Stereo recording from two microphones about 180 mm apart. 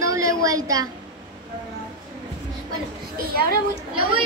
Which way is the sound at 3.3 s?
55° right (ahead or behind).